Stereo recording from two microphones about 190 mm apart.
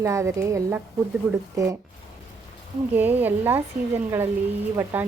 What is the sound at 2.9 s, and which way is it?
Speech, 10° right (ahead or behind).